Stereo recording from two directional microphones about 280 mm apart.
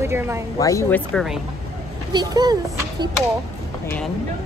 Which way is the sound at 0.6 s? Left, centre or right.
Centre.